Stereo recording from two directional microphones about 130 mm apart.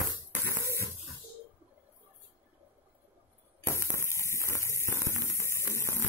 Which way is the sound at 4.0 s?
20° left (ahead or behind).